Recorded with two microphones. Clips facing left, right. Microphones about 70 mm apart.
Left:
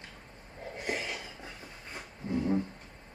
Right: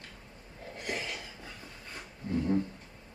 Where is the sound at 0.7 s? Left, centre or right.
Left.